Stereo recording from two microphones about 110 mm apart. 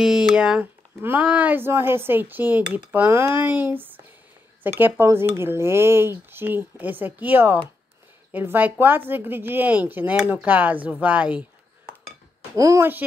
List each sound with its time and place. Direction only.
0.0 s cutlery: 5° right (ahead or behind)
4.6 s speech: 20° right (ahead or behind)
8.3 s cutlery: 15° right (ahead or behind)
12.5 s speech: 30° right (ahead or behind)